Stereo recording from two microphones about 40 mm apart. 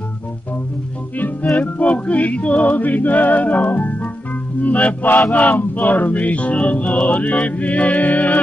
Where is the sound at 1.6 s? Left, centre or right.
Left.